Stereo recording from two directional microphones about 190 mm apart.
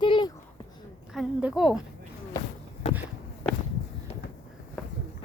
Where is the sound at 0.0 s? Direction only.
25° left (ahead or behind).